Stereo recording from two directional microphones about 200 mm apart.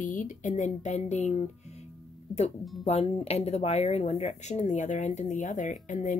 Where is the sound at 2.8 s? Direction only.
30° left (ahead or behind).